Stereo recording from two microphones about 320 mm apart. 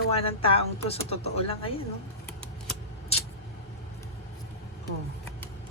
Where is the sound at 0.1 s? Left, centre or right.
Centre.